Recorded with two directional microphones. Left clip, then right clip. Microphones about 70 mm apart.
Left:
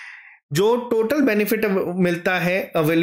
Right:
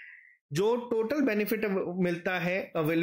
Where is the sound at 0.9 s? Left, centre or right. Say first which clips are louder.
Left 9 dB; centre.